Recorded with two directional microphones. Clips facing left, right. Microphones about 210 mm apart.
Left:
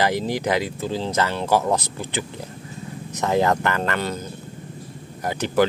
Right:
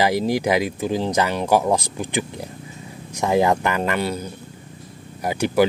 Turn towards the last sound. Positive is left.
turn(degrees=-10)  # may be behind; listen again after turning